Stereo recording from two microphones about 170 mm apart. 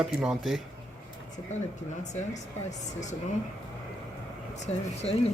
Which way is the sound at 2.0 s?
45° left (ahead or behind).